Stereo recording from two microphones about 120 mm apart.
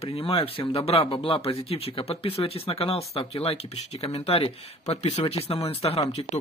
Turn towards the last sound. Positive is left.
turn(degrees=55)  # may be behind; listen again after turning